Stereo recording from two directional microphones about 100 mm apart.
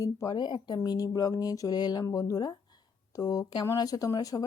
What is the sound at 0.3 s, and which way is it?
Speech, 50° left (ahead or behind).